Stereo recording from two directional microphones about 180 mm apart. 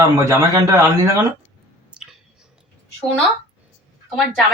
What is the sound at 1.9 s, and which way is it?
Whispering, 5° right (ahead or behind).